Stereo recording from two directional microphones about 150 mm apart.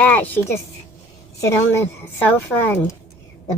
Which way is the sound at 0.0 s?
10° left (ahead or behind).